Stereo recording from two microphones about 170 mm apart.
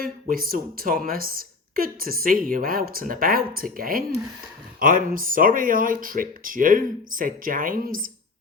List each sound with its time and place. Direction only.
0.0 s a woman's voice: 60° right (ahead or behind)